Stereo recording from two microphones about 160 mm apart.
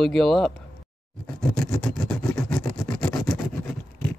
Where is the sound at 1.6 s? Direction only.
5° left (ahead or behind).